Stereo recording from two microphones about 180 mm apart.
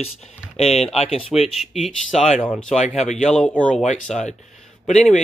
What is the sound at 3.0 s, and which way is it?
Speech, 40° left (ahead or behind).